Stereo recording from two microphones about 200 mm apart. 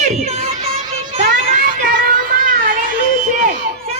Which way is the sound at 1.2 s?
45° right (ahead or behind).